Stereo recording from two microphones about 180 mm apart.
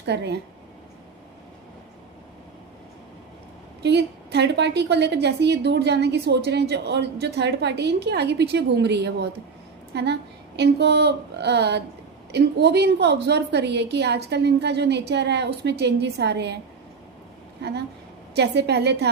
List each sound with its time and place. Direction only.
0.0 s a woman's voice: 70° right (ahead or behind)
3.8 s a woman's voice: 70° right (ahead or behind)
17.6 s a woman's voice: 65° right (ahead or behind)